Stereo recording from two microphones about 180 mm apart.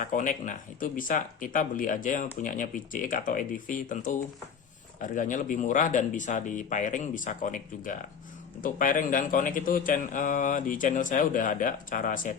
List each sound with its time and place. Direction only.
0.0 s a man's voice: 45° left (ahead or behind)